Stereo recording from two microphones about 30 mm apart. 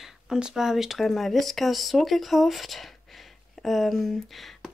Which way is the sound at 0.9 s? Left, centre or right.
Centre.